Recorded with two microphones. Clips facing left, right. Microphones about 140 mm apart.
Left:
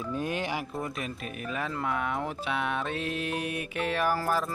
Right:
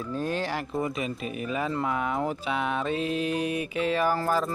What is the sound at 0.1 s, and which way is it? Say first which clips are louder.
Speech: right 2 dB; 15° left (ahead or behind).